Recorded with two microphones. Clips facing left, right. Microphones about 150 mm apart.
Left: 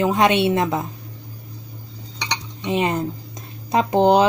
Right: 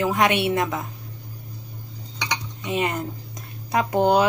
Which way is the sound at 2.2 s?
25° left (ahead or behind).